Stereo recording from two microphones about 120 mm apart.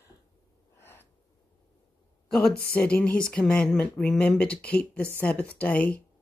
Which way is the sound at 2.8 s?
10° left (ahead or behind).